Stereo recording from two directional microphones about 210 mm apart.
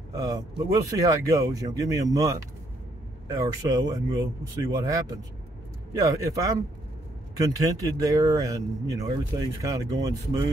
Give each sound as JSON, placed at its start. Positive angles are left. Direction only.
{"t": 0.1, "sound": "speech", "side_deg": -15}